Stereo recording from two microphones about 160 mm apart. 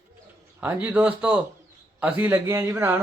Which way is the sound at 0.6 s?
10° right (ahead or behind).